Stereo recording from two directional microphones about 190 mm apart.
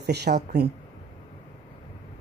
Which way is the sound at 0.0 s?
60° right (ahead or behind).